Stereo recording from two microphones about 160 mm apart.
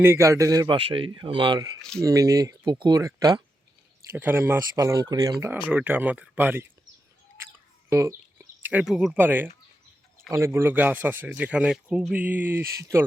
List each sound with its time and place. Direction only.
0.0 s speech: 15° right (ahead or behind)
4.1 s speech: 10° right (ahead or behind)
7.9 s a sound: 15° right (ahead or behind)
9.1 s speech: 10° right (ahead or behind)